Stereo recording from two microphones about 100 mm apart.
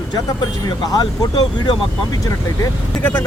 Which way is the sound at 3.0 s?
25° left (ahead or behind).